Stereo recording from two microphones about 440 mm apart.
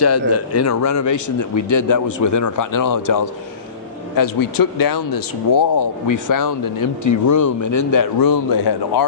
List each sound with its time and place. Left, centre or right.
0.0 s speech: left